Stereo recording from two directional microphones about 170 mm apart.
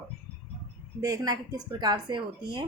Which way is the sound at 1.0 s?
20° right (ahead or behind).